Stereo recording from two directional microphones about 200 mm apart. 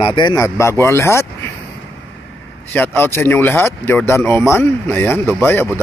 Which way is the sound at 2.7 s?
10° left (ahead or behind).